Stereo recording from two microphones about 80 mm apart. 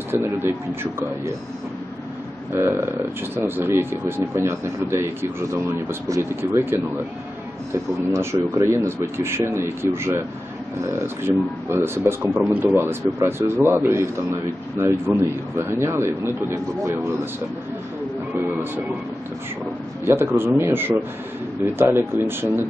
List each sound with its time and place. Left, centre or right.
0.1 s a man's voice: right
2.5 s speech: right
7.7 s speech: right
20.1 s a man's voice: right